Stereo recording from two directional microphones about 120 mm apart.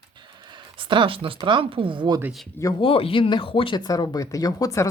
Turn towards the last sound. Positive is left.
turn(degrees=30)  # may be behind; listen again after turning